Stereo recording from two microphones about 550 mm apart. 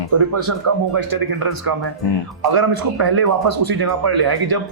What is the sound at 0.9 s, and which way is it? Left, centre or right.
Speech, right.